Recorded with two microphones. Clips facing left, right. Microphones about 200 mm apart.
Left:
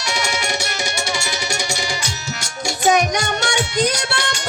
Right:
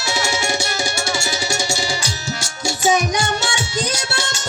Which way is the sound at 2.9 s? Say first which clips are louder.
Left 1 dB; 60° left (ahead or behind).